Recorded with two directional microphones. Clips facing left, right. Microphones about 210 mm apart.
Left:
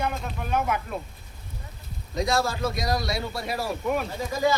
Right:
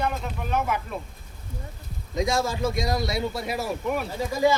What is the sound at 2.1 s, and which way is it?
A man's voice, 20° right (ahead or behind).